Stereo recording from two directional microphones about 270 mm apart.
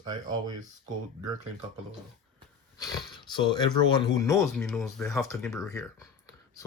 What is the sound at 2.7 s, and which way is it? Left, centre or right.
Speech, centre.